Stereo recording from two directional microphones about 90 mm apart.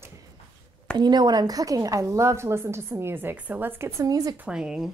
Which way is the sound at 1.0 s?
50° right (ahead or behind).